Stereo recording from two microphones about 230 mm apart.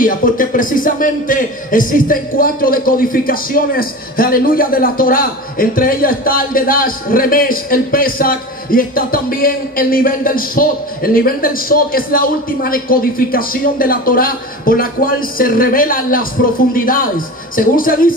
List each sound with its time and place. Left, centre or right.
0.0 s speech: left